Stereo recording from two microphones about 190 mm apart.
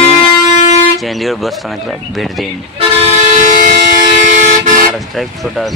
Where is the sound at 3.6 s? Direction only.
40° right (ahead or behind).